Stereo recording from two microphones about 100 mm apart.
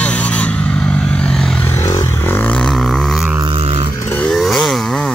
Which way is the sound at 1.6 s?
25° left (ahead or behind).